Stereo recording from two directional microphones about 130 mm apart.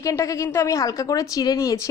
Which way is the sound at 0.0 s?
25° left (ahead or behind).